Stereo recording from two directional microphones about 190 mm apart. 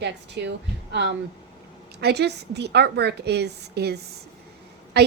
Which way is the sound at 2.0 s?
60° right (ahead or behind).